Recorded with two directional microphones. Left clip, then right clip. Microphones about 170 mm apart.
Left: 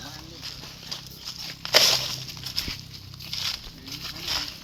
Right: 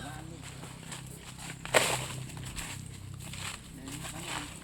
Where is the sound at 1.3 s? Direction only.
75° left (ahead or behind).